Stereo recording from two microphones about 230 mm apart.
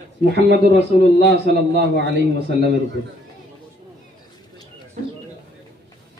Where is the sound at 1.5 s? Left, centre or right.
Right.